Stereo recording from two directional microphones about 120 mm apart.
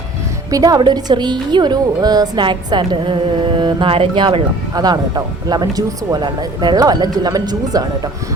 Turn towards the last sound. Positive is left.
turn(degrees=-30)  # may be behind; listen again after turning